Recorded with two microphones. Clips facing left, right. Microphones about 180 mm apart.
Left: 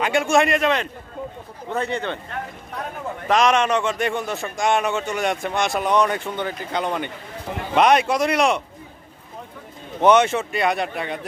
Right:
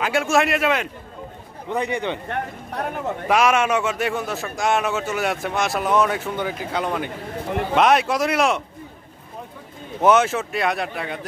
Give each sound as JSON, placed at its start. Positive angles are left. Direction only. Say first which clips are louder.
{"t": 0.0, "sound": "a man's voice", "louder": "left 1 dB", "side_deg": 0}
{"t": 2.2, "sound": "speech", "louder": "right 4 dB", "side_deg": -60}
{"t": 3.3, "sound": "a man's voice", "louder": "left 1 dB", "side_deg": -10}
{"t": 10.0, "sound": "a man's voice", "louder": "left 1 dB", "side_deg": 0}